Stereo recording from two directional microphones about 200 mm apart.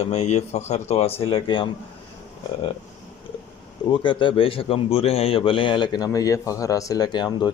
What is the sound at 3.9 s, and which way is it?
A man's voice, 25° left (ahead or behind).